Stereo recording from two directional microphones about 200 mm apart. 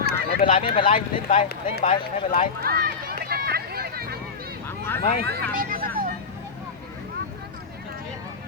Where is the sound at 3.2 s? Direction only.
50° right (ahead or behind).